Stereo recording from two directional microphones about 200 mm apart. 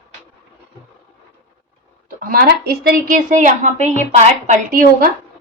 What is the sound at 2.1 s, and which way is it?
A woman's voice, 45° right (ahead or behind).